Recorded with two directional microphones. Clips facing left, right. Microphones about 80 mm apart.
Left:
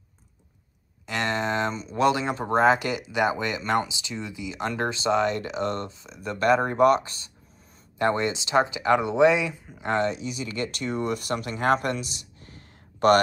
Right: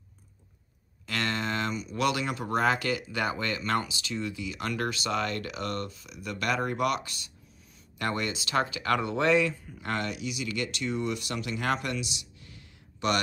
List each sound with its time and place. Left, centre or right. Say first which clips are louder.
1.0 s speech: left 4 dB; left